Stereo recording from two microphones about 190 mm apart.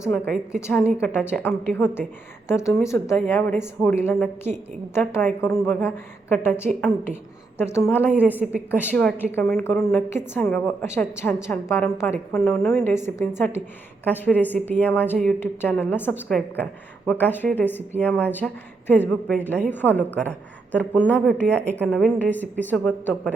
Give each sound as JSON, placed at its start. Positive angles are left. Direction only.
{"t": 0.1, "sound": "a woman's voice", "side_deg": 5}
{"t": 8.1, "sound": "a woman's voice", "side_deg": -10}
{"t": 8.8, "sound": "speech", "side_deg": 10}